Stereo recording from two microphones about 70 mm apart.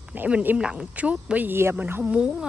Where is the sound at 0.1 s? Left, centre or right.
Right.